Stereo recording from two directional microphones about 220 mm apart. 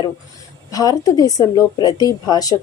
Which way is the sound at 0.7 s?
15° left (ahead or behind).